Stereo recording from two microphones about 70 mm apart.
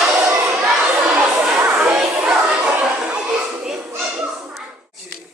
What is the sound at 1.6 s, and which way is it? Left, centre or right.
Music, right.